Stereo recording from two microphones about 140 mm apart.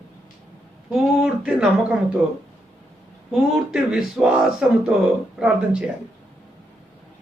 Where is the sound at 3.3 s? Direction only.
5° right (ahead or behind).